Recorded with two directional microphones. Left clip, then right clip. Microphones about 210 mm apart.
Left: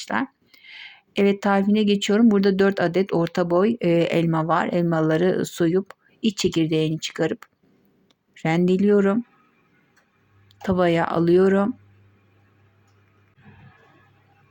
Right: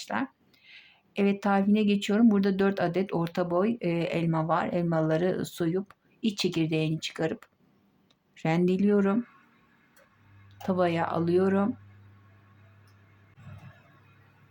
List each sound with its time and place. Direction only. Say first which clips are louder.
0.0 s speech: left 6 dB; 25° left (ahead or behind)
10.6 s speech: left 6 dB; 20° left (ahead or behind)